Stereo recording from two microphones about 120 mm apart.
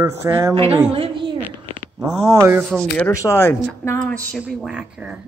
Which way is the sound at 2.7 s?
5° right (ahead or behind).